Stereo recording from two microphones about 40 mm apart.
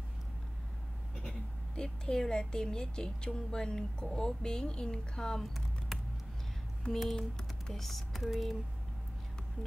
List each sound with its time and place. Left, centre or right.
1.8 s a woman's voice: centre
6.9 s typing: centre